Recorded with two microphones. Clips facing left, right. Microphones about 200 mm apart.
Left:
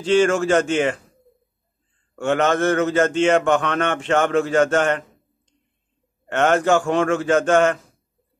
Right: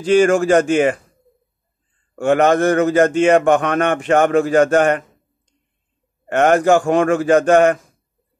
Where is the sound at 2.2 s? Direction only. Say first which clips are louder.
Right 5 dB; 55° right (ahead or behind).